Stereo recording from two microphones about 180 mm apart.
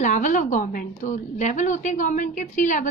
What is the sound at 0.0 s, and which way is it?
A woman's voice, 45° left (ahead or behind).